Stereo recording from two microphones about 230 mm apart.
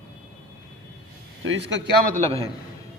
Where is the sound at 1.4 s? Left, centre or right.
Right.